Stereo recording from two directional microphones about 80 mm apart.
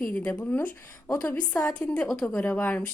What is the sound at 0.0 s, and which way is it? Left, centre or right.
A woman's voice, centre.